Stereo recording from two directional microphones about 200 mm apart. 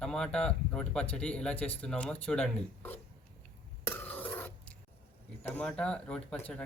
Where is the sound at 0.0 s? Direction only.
5° left (ahead or behind).